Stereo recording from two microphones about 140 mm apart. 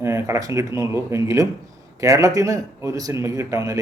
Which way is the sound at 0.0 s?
20° right (ahead or behind).